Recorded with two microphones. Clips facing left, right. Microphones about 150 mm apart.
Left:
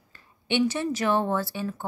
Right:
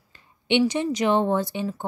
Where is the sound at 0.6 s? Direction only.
15° right (ahead or behind).